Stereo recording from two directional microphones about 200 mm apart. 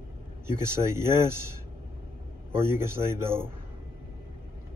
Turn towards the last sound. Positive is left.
turn(degrees=-10)  # may be behind; listen again after turning